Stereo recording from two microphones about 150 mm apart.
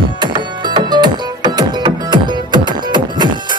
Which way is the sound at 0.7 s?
30° right (ahead or behind).